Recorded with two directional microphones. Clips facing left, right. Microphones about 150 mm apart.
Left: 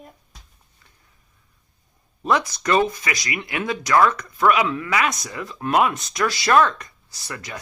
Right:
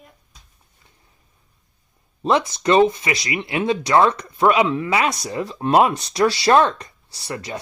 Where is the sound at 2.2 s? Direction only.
25° right (ahead or behind).